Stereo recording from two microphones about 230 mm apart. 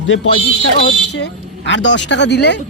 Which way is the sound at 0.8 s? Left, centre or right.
Left.